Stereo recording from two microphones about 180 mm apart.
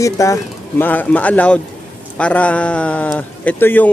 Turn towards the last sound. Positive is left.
turn(degrees=10)  # may be behind; listen again after turning